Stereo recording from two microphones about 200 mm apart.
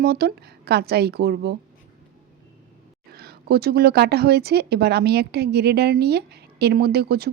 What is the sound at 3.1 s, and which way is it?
Speech, 50° right (ahead or behind).